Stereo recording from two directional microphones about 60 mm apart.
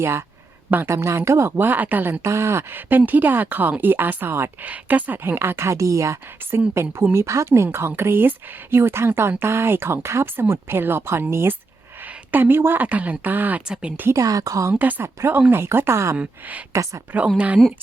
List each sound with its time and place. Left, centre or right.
0.0 s speech: right
1.5 s speech: right
2.2 s speech: right
4.6 s speech: right
5.3 s speech: right
6.4 s speech: right
7.1 s speech: right
8.8 s speech: right
11.9 s a woman's voice: right
14.1 s a woman's voice: right
14.8 s speech: right
16.1 s speech: right
16.7 s speech: right
17.2 s speech: right